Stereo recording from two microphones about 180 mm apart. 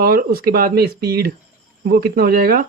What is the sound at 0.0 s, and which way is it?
Speech, 55° right (ahead or behind).